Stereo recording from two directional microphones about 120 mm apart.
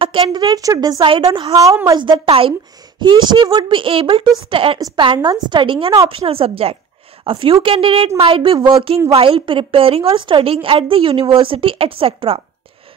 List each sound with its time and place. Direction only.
0.0 s speech: 45° right (ahead or behind); by 1.0 s 30° right (ahead or behind)
1.0 s a woman's voice: 45° right (ahead or behind)
8.5 s speech: 30° right (ahead or behind)
9.1 s a woman's voice: 50° right (ahead or behind)